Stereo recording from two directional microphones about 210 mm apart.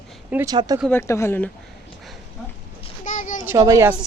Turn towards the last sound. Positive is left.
turn(degrees=-15)  # may be behind; listen again after turning